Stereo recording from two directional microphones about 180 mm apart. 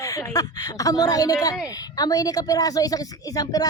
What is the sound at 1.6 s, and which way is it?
A woman's voice, 20° left (ahead or behind).